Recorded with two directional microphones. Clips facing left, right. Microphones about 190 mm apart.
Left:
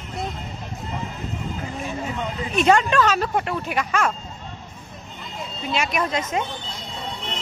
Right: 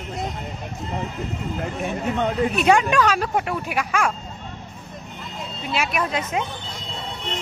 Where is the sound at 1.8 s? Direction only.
65° right (ahead or behind).